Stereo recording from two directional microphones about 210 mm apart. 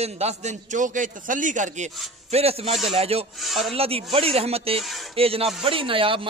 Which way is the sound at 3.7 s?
25° right (ahead or behind).